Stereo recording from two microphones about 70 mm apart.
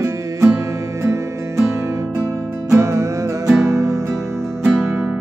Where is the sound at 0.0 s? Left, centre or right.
Right.